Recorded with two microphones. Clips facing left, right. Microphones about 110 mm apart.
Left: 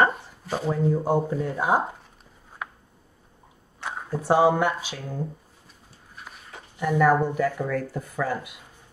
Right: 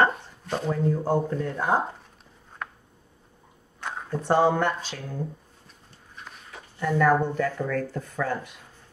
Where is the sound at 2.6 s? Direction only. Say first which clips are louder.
Even; 5° left (ahead or behind).